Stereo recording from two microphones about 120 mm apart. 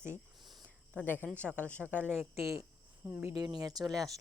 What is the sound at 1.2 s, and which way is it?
Speech, 10° left (ahead or behind).